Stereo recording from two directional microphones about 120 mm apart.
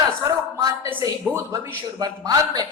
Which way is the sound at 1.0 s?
25° right (ahead or behind).